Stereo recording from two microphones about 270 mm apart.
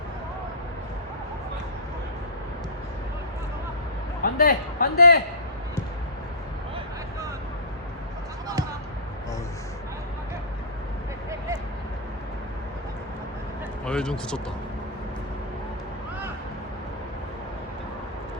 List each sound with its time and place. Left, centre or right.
4.2 s a man's voice: left
13.8 s speech: centre